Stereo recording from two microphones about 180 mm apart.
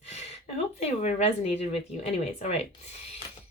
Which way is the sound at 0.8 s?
40° left (ahead or behind).